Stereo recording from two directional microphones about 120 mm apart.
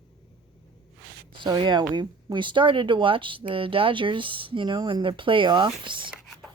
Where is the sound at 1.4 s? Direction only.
40° right (ahead or behind).